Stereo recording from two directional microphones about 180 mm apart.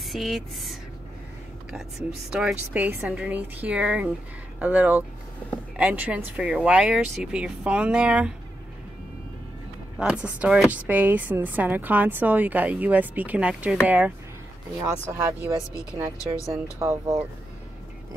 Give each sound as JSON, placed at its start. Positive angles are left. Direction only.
{"t": 0.1, "sound": "a woman's voice", "side_deg": 0}
{"t": 9.9, "sound": "a woman's voice", "side_deg": -5}
{"t": 16.3, "sound": "speech", "side_deg": 15}
{"t": 16.7, "sound": "a woman's voice", "side_deg": -15}